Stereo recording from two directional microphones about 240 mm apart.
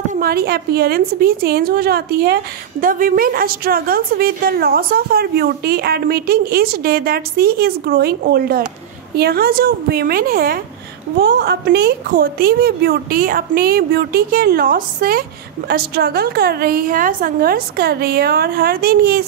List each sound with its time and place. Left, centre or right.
0.1 s a woman's voice: right